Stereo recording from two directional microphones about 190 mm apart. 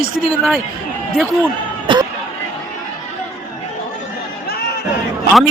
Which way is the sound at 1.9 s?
25° right (ahead or behind).